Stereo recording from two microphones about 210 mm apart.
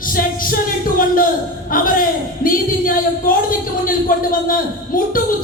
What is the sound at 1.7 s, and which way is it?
A man's voice, 40° left (ahead or behind).